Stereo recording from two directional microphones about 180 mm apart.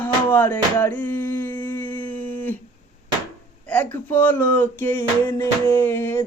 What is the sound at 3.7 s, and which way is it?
Speech, 10° left (ahead or behind).